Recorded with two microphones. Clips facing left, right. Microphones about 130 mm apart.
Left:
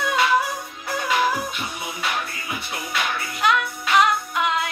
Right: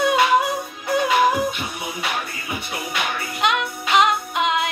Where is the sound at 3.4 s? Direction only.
20° right (ahead or behind).